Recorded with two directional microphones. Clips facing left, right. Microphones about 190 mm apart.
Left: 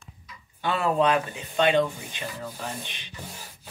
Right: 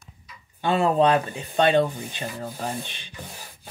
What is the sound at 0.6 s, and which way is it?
Speech, 25° right (ahead or behind).